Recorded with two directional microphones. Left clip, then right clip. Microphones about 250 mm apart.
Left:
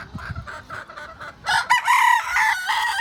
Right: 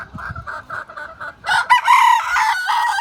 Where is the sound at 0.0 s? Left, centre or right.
Centre.